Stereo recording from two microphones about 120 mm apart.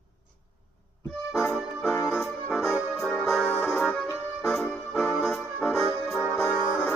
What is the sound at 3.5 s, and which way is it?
Accordion, 15° left (ahead or behind).